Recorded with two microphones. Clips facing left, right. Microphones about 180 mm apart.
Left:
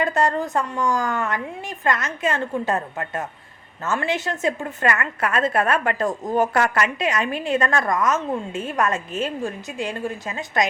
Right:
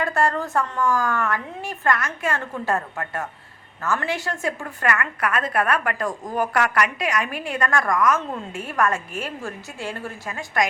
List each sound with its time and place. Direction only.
0.0 s a woman's voice: 20° left (ahead or behind)